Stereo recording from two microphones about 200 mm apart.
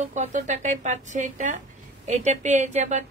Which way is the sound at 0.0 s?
40° right (ahead or behind).